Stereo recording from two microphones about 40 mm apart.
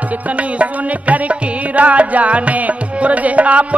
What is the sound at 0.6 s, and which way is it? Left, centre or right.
Music, right.